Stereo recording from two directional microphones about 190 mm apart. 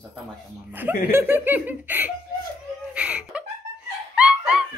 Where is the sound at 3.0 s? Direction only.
5° right (ahead or behind).